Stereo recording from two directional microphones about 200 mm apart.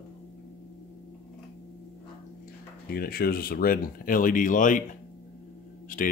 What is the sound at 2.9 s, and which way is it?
Speech, 50° left (ahead or behind).